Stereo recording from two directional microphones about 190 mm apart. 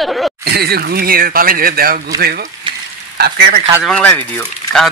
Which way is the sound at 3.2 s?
55° right (ahead or behind).